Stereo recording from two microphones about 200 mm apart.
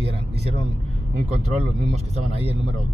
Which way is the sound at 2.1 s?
30° right (ahead or behind).